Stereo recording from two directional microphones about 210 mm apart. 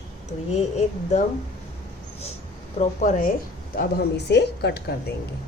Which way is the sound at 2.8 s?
35° left (ahead or behind).